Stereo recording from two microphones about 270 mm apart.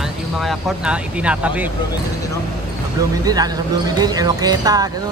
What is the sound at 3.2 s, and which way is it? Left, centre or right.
Speech, centre.